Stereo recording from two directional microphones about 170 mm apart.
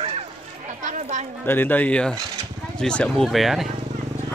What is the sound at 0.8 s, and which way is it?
Speech, 45° right (ahead or behind).